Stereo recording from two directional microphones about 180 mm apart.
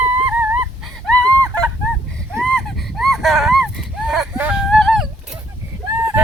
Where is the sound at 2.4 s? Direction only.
5° left (ahead or behind).